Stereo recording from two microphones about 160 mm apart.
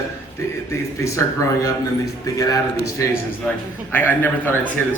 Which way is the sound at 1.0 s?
20° left (ahead or behind).